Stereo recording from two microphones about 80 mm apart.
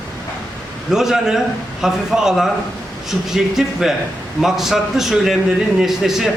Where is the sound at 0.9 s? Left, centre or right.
Centre.